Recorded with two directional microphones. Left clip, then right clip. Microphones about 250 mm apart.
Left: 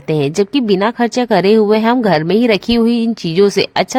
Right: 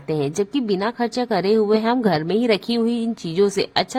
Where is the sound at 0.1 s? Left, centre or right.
Left.